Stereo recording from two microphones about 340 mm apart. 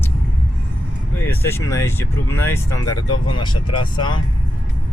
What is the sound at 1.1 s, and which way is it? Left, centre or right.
Speech, centre.